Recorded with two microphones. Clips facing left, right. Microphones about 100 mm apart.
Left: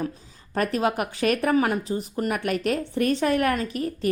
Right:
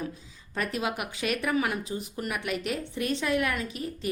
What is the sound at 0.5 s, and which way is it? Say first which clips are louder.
Speech: left 7 dB; 45° left (ahead or behind).